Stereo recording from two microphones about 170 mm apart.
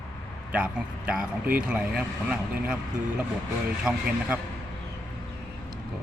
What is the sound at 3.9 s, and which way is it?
Speech, 5° right (ahead or behind).